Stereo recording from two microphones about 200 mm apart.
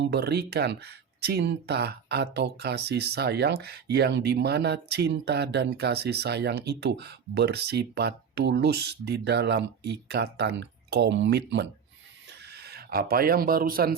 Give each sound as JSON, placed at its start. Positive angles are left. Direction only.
{"t": 0.0, "sound": "speech", "side_deg": -55}